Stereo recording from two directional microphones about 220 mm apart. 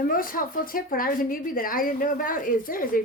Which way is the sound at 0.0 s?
40° left (ahead or behind).